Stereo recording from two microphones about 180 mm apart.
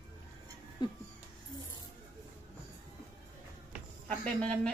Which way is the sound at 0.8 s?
25° left (ahead or behind).